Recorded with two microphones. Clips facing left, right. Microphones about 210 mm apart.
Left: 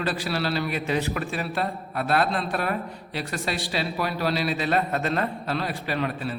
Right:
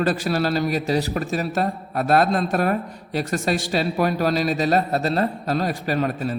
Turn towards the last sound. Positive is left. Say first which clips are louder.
# right 5 dB
turn(degrees=-45)  # may be behind; listen again after turning